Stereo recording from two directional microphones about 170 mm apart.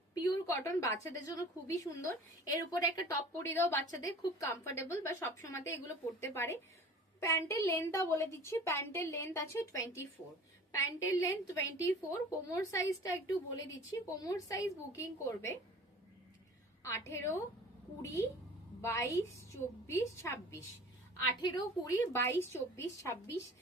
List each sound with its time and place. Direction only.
0.1 s a woman's voice: 20° left (ahead or behind)
16.8 s a woman's voice: 15° left (ahead or behind)